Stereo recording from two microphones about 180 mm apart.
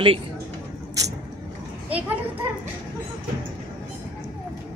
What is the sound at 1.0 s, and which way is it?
Vehicle, 20° right (ahead or behind).